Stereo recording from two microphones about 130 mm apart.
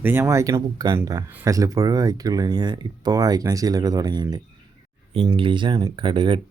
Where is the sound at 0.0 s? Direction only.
15° right (ahead or behind).